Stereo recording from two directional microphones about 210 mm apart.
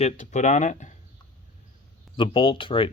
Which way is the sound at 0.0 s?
35° left (ahead or behind).